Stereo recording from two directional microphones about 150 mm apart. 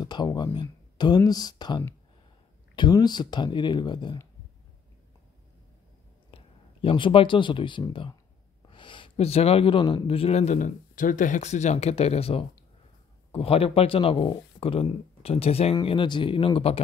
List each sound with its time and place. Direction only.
0.0 s speech: 25° left (ahead or behind)
6.3 s speech: 35° left (ahead or behind)